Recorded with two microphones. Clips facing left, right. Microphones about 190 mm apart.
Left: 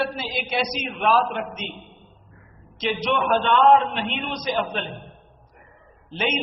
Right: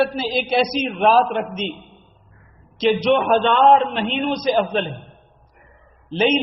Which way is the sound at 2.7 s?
35° right (ahead or behind).